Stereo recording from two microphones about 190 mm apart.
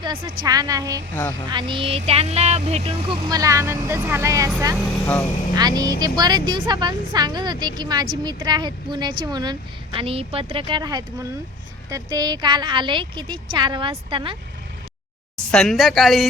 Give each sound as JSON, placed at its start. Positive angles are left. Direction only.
{"t": 0.0, "sound": "a woman's voice", "side_deg": -25}
{"t": 1.1, "sound": "speech", "side_deg": 15}
{"t": 1.5, "sound": "a woman's voice", "side_deg": -25}
{"t": 5.5, "sound": "a woman's voice", "side_deg": -20}
{"t": 15.5, "sound": "speech", "side_deg": 0}